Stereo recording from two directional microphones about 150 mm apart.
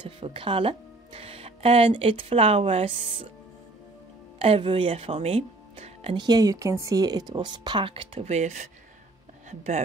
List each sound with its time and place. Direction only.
0.2 s speech: 35° right (ahead or behind)
4.4 s speech: 40° right (ahead or behind)